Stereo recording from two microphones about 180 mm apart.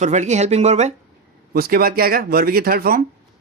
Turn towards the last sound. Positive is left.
turn(degrees=-55)  # may be behind; listen again after turning